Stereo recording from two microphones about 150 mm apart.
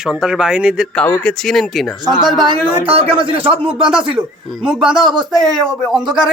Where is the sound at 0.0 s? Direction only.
5° right (ahead or behind).